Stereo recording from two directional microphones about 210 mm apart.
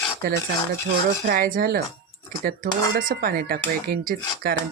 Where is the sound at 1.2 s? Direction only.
45° right (ahead or behind).